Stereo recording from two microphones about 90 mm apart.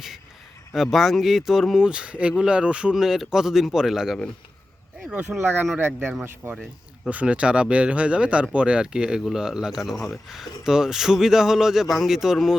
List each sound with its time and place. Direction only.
0.7 s speech: centre (ahead or behind)
5.4 s speech: 20° right (ahead or behind)
7.1 s speech: 15° right (ahead or behind)